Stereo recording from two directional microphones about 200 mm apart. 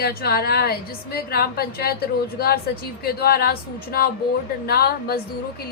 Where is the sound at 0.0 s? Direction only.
50° left (ahead or behind).